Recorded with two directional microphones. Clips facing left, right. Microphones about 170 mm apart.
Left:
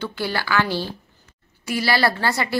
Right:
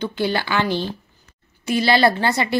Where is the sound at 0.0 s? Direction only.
20° right (ahead or behind).